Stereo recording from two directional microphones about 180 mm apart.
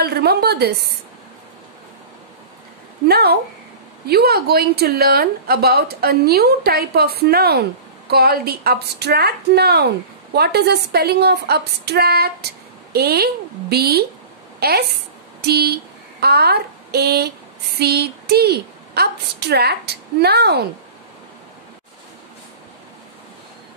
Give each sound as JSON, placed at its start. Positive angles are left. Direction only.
{"t": 0.0, "sound": "a woman's voice", "side_deg": -65}
{"t": 3.1, "sound": "a woman's voice", "side_deg": -60}